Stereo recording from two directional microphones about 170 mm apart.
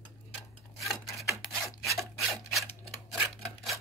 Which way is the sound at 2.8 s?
Centre (ahead or behind).